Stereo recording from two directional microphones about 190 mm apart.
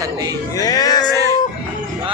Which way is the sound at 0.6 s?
20° left (ahead or behind).